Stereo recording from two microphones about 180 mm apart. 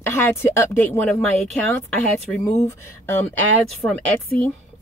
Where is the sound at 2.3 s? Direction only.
10° left (ahead or behind).